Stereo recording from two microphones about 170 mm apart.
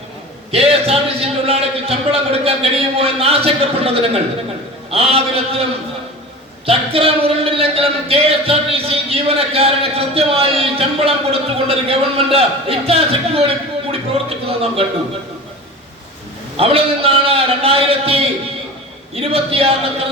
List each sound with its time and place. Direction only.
0.5 s speech: 35° right (ahead or behind)
6.7 s speech: 35° right (ahead or behind)
14.3 s a sound: 35° right (ahead or behind)
16.6 s speech: 35° right (ahead or behind)